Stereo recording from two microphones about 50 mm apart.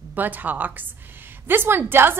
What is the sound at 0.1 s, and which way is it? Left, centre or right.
A woman's voice, right.